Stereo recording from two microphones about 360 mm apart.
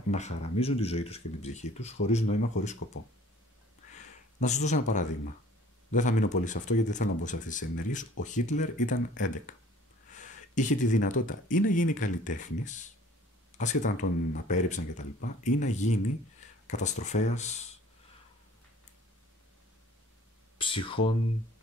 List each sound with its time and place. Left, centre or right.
0.1 s speech: centre
4.4 s speech: centre
20.5 s speech: centre